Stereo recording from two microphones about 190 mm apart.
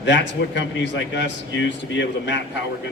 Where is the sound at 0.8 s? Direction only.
70° left (ahead or behind).